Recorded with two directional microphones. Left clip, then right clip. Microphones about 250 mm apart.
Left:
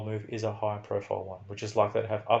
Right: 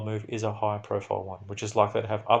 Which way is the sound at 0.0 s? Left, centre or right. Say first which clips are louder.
Right 2 dB; right.